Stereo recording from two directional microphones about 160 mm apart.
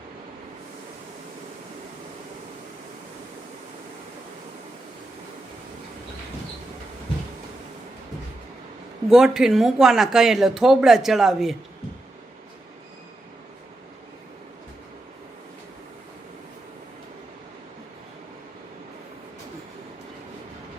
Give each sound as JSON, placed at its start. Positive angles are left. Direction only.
{"t": 9.0, "sound": "speech", "side_deg": 0}